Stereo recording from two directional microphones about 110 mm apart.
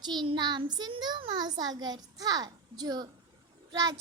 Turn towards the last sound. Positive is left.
turn(degrees=-35)  # may be behind; listen again after turning